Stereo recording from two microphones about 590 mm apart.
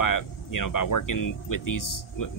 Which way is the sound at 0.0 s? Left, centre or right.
Left.